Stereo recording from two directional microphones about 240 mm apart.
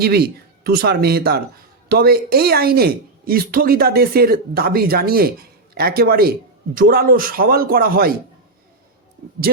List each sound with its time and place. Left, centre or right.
0.0 s speech: right